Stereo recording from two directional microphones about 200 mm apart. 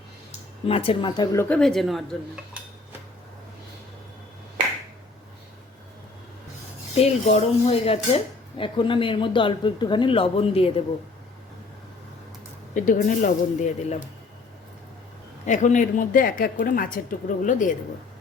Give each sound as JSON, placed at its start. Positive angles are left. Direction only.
{"t": 0.3, "sound": "speech", "side_deg": 30}
{"t": 1.5, "sound": "cutlery", "side_deg": 5}
{"t": 6.9, "sound": "speech", "side_deg": 30}
{"t": 12.7, "sound": "speech", "side_deg": 40}
{"t": 15.4, "sound": "a woman's voice", "side_deg": 40}